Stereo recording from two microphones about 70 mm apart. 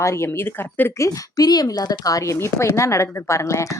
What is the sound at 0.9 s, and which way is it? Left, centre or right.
A woman's voice, left.